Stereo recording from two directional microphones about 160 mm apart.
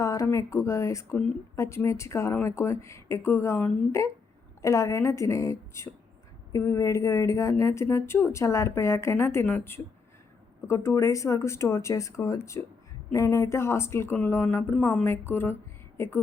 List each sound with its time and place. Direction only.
0.0 s a woman's voice: 20° left (ahead or behind)